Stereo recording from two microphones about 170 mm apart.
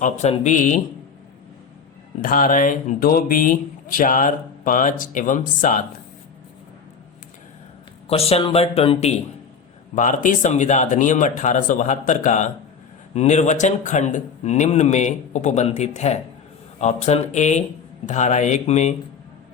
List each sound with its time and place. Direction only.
0.0 s speech: 45° left (ahead or behind)
2.2 s speech: 55° left (ahead or behind)
8.0 s speech: 35° left (ahead or behind)
9.9 s speech: 50° left (ahead or behind)